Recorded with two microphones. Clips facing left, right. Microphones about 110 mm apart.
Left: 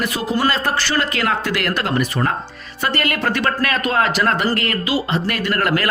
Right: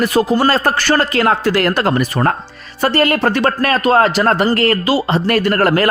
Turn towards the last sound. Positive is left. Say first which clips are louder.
# right 6 dB
turn(degrees=-35)  # may be behind; listen again after turning